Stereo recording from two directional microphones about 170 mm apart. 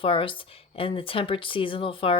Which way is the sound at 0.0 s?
30° left (ahead or behind).